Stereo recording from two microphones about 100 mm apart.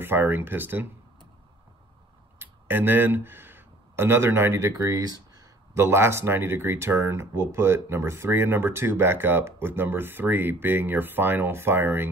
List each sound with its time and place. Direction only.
0.0 s speech: 20° right (ahead or behind)
2.3 s speech: 20° right (ahead or behind)